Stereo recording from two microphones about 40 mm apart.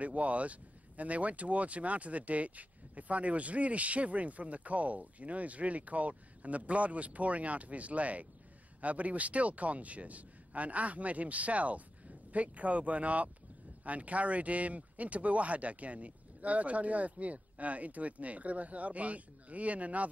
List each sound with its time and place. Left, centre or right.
0.0 s speech: right